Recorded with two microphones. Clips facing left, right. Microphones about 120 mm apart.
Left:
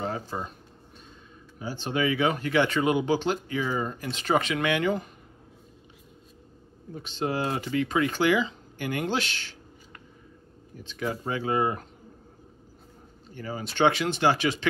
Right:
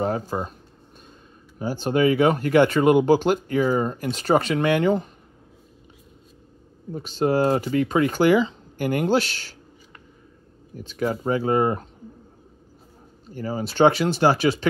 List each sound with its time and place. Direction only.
0.0 s speech: 45° right (ahead or behind)
1.6 s speech: 45° right (ahead or behind)
6.9 s speech: 40° right (ahead or behind)
10.8 s speech: 40° right (ahead or behind)
13.3 s speech: 35° right (ahead or behind)